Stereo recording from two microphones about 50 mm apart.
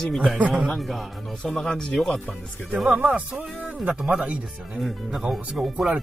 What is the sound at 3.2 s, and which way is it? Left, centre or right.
Speech, right.